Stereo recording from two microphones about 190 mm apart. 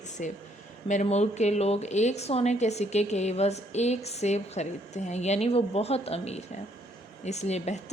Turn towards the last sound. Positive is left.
turn(degrees=35)  # may be behind; listen again after turning